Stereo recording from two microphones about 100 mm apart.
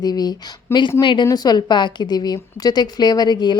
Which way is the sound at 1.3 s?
40° left (ahead or behind).